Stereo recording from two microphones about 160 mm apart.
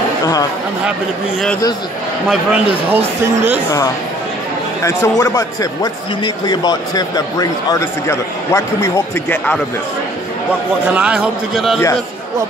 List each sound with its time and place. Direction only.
2.2 s a man's voice: 10° right (ahead or behind)
4.8 s a man's voice: 20° left (ahead or behind)
10.9 s a man's voice: 5° right (ahead or behind)